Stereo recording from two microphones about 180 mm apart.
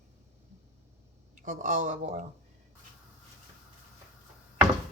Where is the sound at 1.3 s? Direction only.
45° right (ahead or behind).